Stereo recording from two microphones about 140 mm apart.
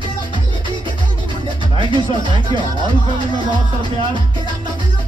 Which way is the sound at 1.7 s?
35° right (ahead or behind).